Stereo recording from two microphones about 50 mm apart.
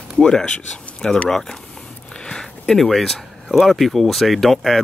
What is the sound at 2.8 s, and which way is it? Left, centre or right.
Speech, centre.